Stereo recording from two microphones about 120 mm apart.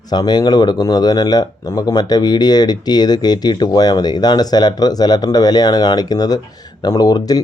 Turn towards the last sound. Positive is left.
turn(degrees=30)  # may be behind; listen again after turning